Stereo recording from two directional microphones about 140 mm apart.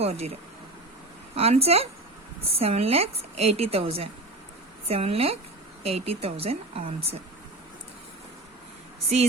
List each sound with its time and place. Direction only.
0.0 s a woman's voice: 45° right (ahead or behind)
1.4 s a woman's voice: 45° right (ahead or behind)